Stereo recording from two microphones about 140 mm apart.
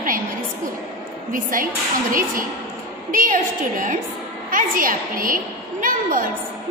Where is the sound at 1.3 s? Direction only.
75° right (ahead or behind).